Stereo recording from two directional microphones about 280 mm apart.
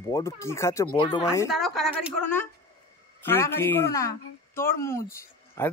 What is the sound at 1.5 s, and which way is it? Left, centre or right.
Speech, centre.